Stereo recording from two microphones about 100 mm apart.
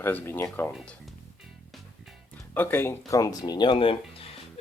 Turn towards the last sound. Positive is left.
turn(degrees=60)  # may be behind; listen again after turning